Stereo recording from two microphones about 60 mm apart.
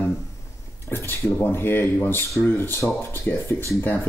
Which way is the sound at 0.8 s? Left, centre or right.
Left.